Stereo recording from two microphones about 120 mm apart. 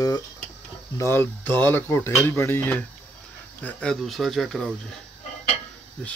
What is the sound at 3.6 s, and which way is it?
Speech, 5° left (ahead or behind).